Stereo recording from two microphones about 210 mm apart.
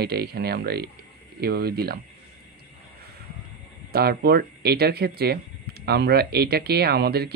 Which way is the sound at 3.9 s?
50° right (ahead or behind).